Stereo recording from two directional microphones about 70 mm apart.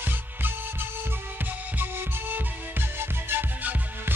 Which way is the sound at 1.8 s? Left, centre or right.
Right.